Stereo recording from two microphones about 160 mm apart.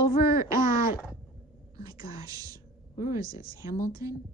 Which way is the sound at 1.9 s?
25° right (ahead or behind).